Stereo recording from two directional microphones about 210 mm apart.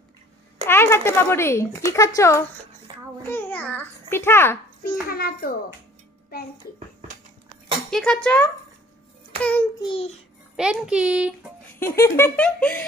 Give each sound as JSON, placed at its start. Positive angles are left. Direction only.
{"t": 0.7, "sound": "speech", "side_deg": 10}
{"t": 2.9, "sound": "child singing", "side_deg": -20}
{"t": 3.3, "sound": "a child's voice", "side_deg": 10}
{"t": 4.8, "sound": "a child's voice", "side_deg": 45}
{"t": 7.9, "sound": "a child's voice", "side_deg": 5}
{"t": 9.8, "sound": "a child's voice", "side_deg": 30}
{"t": 10.5, "sound": "a child's voice", "side_deg": -5}
{"t": 11.8, "sound": "speech", "side_deg": 10}